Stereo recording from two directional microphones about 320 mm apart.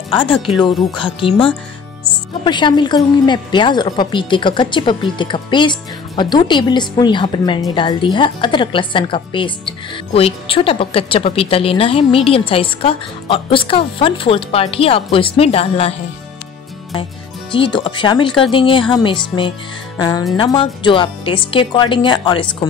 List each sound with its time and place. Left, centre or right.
0.1 s a woman's voice: centre
17.5 s a woman's voice: centre